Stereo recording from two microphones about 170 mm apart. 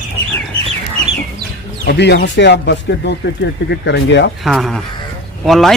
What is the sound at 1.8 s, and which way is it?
Speech, 75° left (ahead or behind).